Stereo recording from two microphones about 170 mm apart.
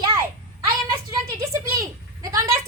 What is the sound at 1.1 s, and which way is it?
A woman's voice, 20° right (ahead or behind).